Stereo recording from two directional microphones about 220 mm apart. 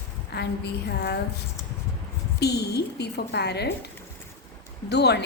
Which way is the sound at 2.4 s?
45° left (ahead or behind).